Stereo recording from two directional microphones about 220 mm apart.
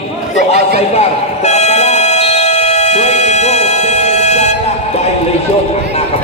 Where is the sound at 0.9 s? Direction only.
30° left (ahead or behind).